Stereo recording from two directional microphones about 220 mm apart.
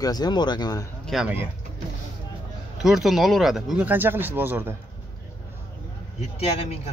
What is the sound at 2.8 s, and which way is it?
Speech, centre (ahead or behind).